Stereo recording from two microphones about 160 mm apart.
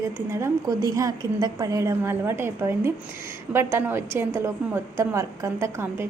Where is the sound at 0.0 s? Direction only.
15° right (ahead or behind).